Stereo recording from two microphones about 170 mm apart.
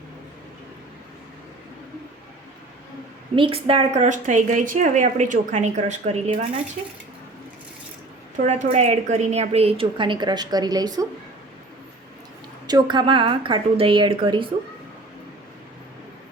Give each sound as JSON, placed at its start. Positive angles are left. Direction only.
{"t": 3.3, "sound": "a woman's voice", "side_deg": -30}
{"t": 8.4, "sound": "a woman's voice", "side_deg": -40}
{"t": 12.6, "sound": "a woman's voice", "side_deg": -25}